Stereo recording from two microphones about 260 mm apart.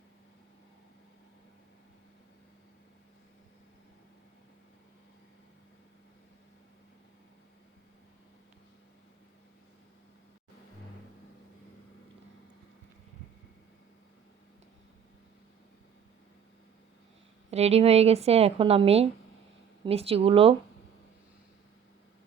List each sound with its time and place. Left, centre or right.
17.5 s speech: right